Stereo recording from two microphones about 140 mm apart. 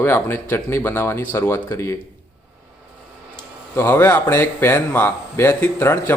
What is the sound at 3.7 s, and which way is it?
Speech, 15° left (ahead or behind).